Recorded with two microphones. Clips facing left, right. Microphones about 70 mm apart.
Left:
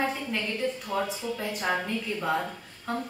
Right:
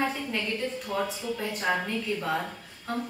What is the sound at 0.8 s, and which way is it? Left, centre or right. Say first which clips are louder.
A woman's voice: even; centre.